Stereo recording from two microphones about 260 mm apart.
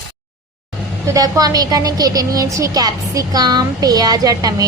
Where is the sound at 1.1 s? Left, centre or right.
Centre.